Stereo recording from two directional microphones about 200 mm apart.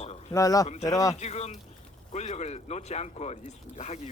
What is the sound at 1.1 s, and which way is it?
Speech, 35° left (ahead or behind).